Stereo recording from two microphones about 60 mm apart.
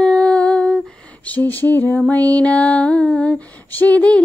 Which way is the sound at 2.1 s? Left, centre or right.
Left.